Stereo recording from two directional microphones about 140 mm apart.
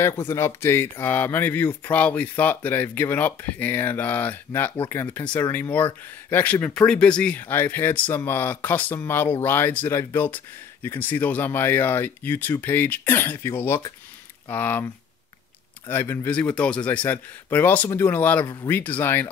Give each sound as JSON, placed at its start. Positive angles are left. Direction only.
{"t": 0.0, "sound": "speech", "side_deg": 15}
{"t": 15.9, "sound": "speech", "side_deg": 15}
{"t": 18.4, "sound": "speech", "side_deg": 30}
{"t": 18.7, "sound": "speech", "side_deg": 15}